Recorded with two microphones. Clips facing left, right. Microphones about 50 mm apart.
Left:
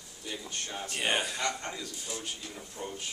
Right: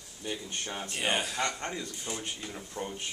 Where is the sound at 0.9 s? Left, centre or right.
Centre.